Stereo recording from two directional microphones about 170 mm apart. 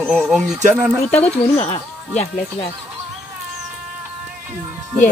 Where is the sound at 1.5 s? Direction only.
40° left (ahead or behind).